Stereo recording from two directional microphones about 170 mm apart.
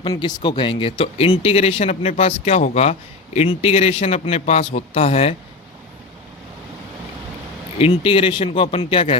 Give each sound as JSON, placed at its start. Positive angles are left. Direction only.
{"t": 0.0, "sound": "speech", "side_deg": 25}
{"t": 7.8, "sound": "speech", "side_deg": 35}